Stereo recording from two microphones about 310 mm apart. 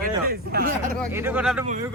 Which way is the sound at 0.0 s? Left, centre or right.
Right.